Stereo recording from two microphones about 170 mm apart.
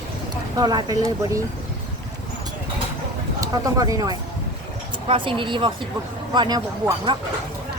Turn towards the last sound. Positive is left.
turn(degrees=-25)  # may be behind; listen again after turning